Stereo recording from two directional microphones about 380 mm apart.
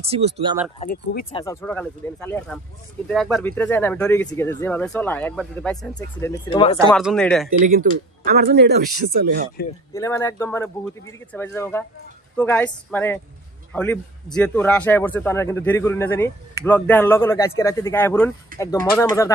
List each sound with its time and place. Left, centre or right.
0.0 s speech: centre
0.7 s speech: centre
1.4 s speech: centre
6.9 s speech: centre
7.6 s speech: right
9.9 s speech: centre